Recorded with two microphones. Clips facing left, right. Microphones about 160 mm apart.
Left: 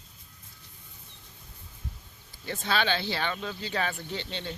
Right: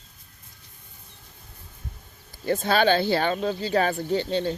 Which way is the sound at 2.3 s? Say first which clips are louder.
Right 8 dB; 40° right (ahead or behind).